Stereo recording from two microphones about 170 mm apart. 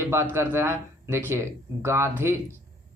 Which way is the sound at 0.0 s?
15° right (ahead or behind).